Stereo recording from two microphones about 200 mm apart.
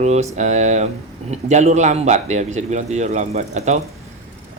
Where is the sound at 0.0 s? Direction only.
35° right (ahead or behind).